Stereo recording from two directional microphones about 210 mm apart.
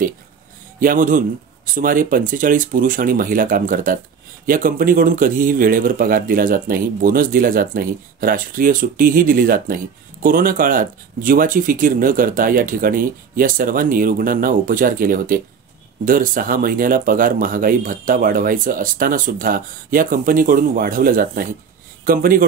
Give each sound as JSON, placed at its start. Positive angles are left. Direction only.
{"t": 0.7, "sound": "speech", "side_deg": -40}